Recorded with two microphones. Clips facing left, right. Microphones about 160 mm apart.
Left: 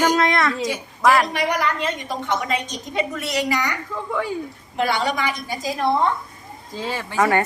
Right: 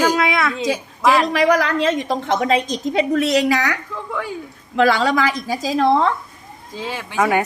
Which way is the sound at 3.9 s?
10° left (ahead or behind).